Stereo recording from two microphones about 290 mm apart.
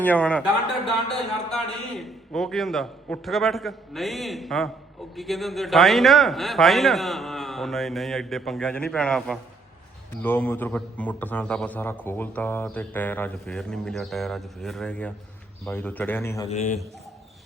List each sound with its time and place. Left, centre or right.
0.0 s a man's voice: centre
1.5 s a man's voice: centre
16.5 s a man's voice: left